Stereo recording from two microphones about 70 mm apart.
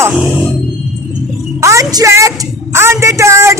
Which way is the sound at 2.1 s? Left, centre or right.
Right.